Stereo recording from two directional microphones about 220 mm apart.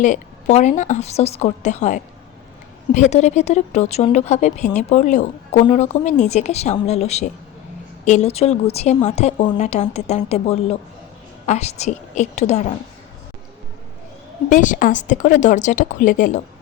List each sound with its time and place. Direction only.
0.0 s a woman's voice: 35° left (ahead or behind)
14.5 s a woman's voice: 35° left (ahead or behind)